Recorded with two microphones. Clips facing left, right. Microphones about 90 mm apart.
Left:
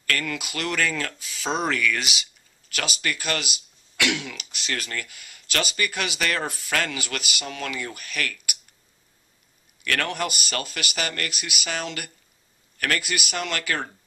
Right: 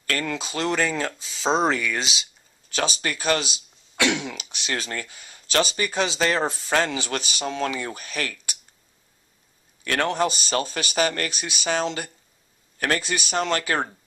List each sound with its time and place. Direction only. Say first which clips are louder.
0.0 s speech: right 1 dB; 30° right (ahead or behind)
9.8 s speech: right 4 dB; 25° right (ahead or behind)